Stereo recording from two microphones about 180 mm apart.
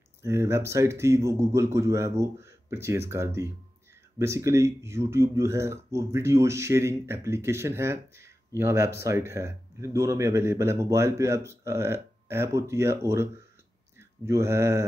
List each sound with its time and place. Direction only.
0.2 s speech: 15° right (ahead or behind)